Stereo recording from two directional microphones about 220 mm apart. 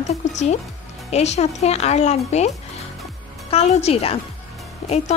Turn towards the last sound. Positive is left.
turn(degrees=30)  # may be behind; listen again after turning